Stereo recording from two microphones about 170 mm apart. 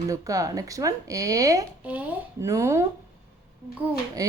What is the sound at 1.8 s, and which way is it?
Speech, 10° right (ahead or behind).